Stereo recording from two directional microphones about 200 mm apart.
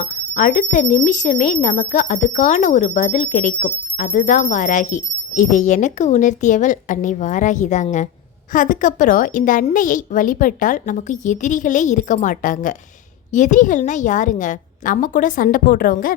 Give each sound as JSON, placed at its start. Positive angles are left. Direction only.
{"t": 0.0, "sound": "speech", "side_deg": 40}